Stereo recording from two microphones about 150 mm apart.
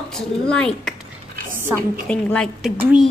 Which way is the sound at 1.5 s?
15° right (ahead or behind).